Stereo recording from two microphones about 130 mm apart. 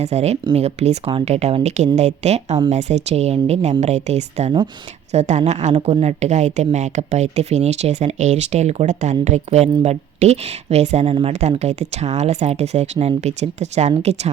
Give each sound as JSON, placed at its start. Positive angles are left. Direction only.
{"t": 0.0, "sound": "speech", "side_deg": -55}